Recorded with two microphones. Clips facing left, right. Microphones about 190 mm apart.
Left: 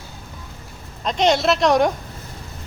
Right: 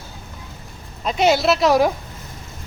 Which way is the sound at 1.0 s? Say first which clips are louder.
Right 1 dB; 5° right (ahead or behind).